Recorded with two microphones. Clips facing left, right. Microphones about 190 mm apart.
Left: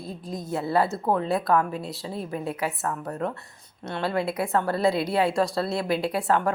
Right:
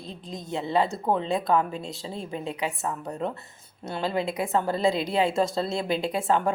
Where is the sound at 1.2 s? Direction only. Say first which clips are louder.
Left 1 dB; 20° right (ahead or behind).